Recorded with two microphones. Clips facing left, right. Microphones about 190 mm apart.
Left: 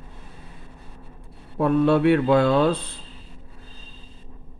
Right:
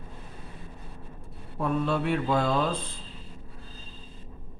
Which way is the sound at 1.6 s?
65° left (ahead or behind).